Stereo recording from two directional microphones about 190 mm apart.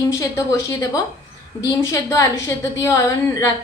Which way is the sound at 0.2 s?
15° left (ahead or behind).